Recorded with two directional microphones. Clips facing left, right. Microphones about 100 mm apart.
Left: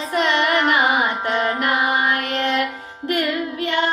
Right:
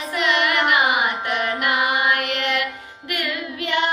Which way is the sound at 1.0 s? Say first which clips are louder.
Left 2 dB; 20° left (ahead or behind).